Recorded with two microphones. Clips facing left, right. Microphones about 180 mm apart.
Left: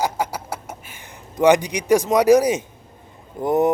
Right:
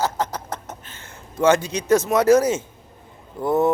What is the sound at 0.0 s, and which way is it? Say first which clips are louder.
Speech: left 1 dB; 10° left (ahead or behind).